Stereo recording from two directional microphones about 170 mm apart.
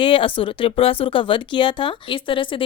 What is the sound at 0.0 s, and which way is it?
Speech, 30° left (ahead or behind).